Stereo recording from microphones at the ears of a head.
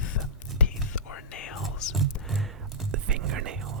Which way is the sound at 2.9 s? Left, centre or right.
Right.